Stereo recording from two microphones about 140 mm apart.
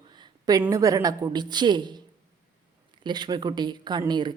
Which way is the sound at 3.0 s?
30° right (ahead or behind).